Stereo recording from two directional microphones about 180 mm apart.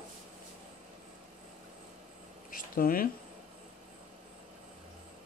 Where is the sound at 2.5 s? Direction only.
50° left (ahead or behind).